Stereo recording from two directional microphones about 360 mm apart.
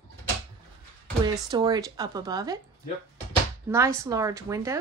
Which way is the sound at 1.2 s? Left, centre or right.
Centre.